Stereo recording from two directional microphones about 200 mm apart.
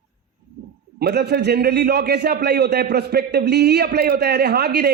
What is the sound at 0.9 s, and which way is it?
A man's voice, 55° right (ahead or behind).